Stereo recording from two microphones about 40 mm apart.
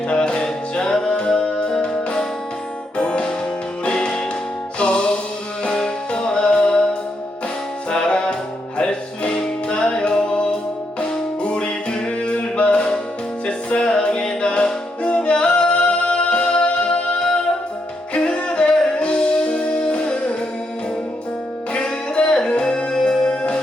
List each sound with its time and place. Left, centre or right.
0.1 s music: left
11.4 s music: left
18.1 s music: left
21.7 s music: left